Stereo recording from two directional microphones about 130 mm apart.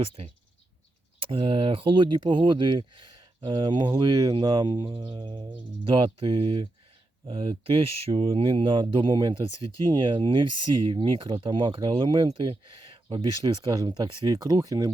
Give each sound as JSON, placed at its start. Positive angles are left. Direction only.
{"t": 0.0, "sound": "speech", "side_deg": -45}